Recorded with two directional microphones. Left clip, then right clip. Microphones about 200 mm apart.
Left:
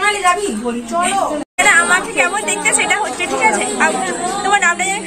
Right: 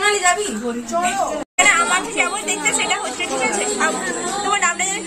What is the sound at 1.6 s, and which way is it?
A woman's voice, centre (ahead or behind).